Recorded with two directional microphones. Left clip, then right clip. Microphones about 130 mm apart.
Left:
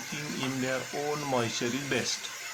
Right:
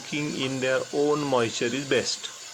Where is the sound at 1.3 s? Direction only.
40° right (ahead or behind).